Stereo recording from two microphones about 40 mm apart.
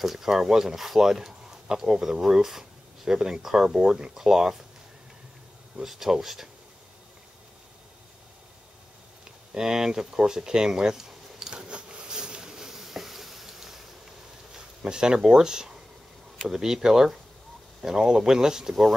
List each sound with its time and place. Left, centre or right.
0.0 s speech: centre
5.8 s speech: centre
9.5 s speech: centre
11.5 s a sound: right; by 13.8 s centre
14.8 s speech: right